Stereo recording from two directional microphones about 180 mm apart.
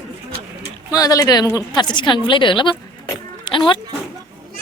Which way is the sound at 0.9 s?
20° left (ahead or behind).